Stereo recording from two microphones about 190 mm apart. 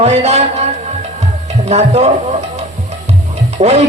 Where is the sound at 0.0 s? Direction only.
35° right (ahead or behind).